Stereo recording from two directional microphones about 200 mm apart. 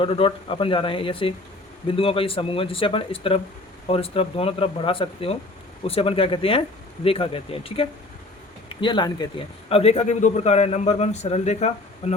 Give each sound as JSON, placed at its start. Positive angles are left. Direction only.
{"t": 0.0, "sound": "a man's voice", "side_deg": 25}